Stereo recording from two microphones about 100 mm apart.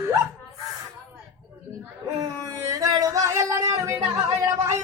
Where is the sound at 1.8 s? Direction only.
30° right (ahead or behind).